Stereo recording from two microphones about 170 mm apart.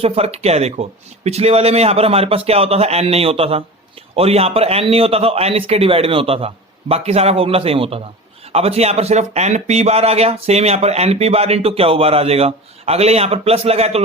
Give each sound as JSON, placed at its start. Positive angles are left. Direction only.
{"t": 0.0, "sound": "speech", "side_deg": -35}